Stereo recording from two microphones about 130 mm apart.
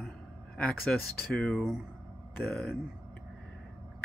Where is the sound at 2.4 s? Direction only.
15° left (ahead or behind).